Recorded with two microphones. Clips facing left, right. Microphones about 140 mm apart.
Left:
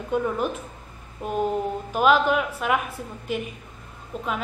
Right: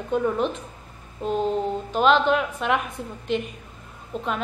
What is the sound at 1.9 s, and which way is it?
A woman's voice, 10° left (ahead or behind).